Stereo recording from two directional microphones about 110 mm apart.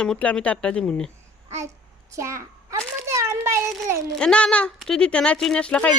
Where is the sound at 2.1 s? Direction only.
25° right (ahead or behind).